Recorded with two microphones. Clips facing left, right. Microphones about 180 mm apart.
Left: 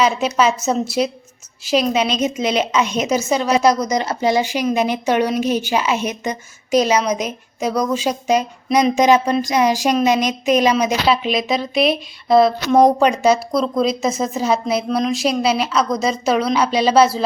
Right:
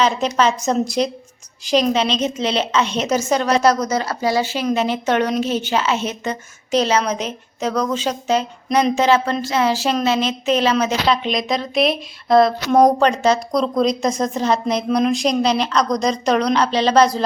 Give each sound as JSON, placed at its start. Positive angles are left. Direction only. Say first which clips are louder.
{"t": 0.0, "sound": "a woman's voice", "louder": "left 1 dB", "side_deg": 10}